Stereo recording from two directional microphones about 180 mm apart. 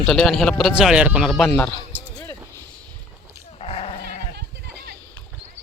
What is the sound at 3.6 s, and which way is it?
Sheep, 30° left (ahead or behind).